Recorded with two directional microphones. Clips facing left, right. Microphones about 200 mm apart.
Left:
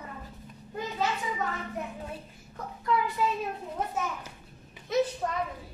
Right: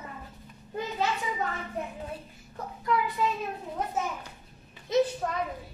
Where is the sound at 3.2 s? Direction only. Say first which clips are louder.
Even; 5° left (ahead or behind).